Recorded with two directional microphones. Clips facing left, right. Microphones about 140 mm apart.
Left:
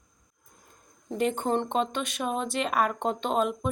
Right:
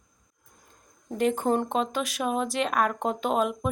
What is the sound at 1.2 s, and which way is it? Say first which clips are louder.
Speech: right 2 dB; centre (ahead or behind).